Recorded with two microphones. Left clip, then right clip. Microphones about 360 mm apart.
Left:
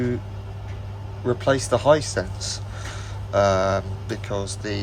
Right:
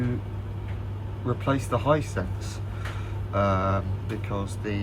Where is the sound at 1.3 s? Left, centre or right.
Left.